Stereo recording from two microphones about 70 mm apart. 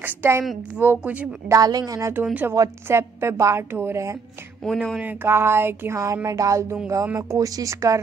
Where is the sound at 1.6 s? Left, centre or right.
Right.